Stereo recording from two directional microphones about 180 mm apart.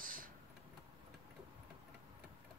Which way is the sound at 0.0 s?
50° right (ahead or behind).